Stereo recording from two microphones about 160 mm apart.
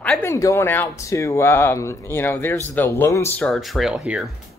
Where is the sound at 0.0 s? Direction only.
10° left (ahead or behind).